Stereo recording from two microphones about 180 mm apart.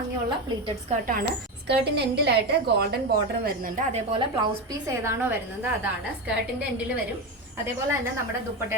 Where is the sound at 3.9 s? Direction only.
30° right (ahead or behind).